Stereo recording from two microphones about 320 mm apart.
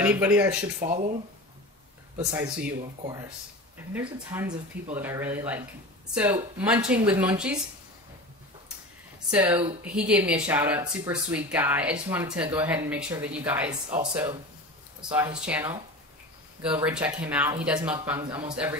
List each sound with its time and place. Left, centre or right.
0.0 s speech: centre
0.7 s speech: right
3.9 s speech: centre
9.3 s speech: centre